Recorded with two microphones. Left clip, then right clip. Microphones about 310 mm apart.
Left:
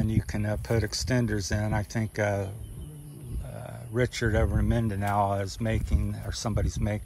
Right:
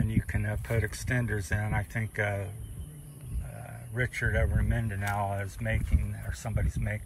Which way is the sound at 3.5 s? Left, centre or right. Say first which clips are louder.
Left 5 dB; left.